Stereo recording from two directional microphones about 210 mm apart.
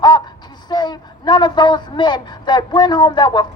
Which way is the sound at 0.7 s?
20° left (ahead or behind).